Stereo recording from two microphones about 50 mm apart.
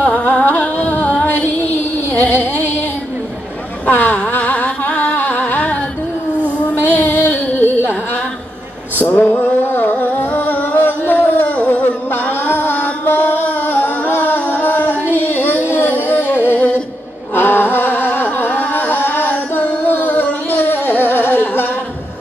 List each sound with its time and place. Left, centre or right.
0.0 s music: left
3.9 s vehicle: left
4.4 s music: left
7.0 s a sound: left
9.0 s a sound: left
9.4 s music: left
11.5 s music: left
11.8 s music: left
15.0 s female singing: left
15.7 s a sound: left
17.3 s music: left